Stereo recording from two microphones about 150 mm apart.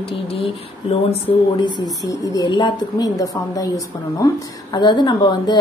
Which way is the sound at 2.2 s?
25° left (ahead or behind).